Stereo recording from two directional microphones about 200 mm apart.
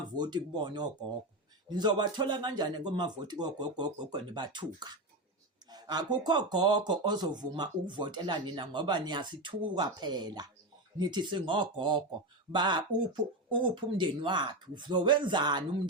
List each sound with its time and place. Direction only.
0.2 s speech: 20° right (ahead or behind)